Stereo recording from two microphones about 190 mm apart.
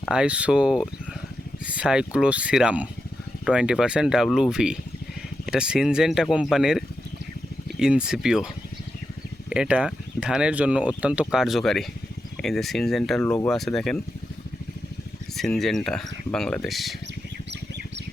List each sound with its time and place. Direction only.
0.0 s speech: 5° right (ahead or behind)
9.5 s speech: 5° right (ahead or behind)
15.4 s speech: centre (ahead or behind)